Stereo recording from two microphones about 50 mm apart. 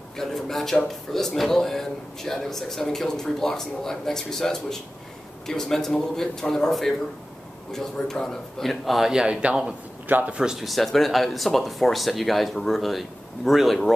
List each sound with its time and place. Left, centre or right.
0.2 s speech: centre
9.1 s a man's voice: centre
10.0 s a man's voice: right
10.3 s speech: centre
10.6 s speech: centre